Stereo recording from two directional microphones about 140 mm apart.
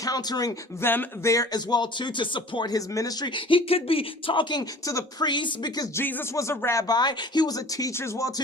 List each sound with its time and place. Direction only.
0.0 s speech: 25° left (ahead or behind)
6.0 s speech: 15° left (ahead or behind)